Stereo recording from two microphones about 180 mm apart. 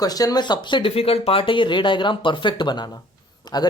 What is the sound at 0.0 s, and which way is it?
Speech, 20° left (ahead or behind).